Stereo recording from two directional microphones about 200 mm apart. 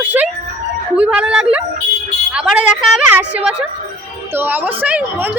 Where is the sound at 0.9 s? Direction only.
5° right (ahead or behind).